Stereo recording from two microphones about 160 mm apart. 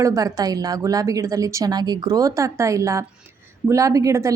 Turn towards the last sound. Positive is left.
turn(degrees=-20)  # may be behind; listen again after turning